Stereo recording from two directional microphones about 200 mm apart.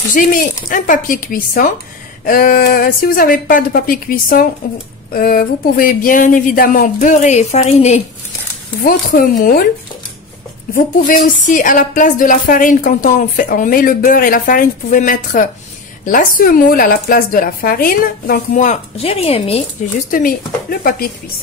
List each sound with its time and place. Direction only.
0.1 s a woman's voice: 40° left (ahead or behind)
10.7 s a woman's voice: 40° left (ahead or behind)
20.1 s a woman's voice: 45° left (ahead or behind)